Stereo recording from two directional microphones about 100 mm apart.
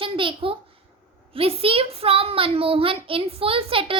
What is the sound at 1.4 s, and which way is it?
A child's voice, 70° right (ahead or behind).